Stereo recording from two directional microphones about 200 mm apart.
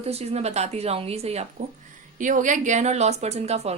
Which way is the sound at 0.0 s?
30° right (ahead or behind).